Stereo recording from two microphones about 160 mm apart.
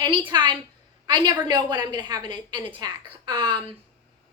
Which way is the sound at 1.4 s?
25° right (ahead or behind).